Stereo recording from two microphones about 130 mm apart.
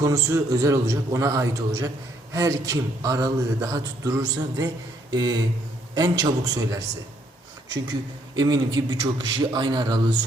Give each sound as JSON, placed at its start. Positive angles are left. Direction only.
{"t": 0.0, "sound": "a man's voice", "side_deg": -25}
{"t": 8.4, "sound": "a man's voice", "side_deg": -35}